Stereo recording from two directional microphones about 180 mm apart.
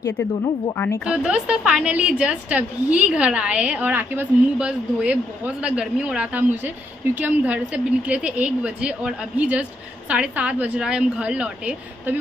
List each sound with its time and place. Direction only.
0.7 s speech: 10° left (ahead or behind)
1.0 s a woman's voice: 5° right (ahead or behind)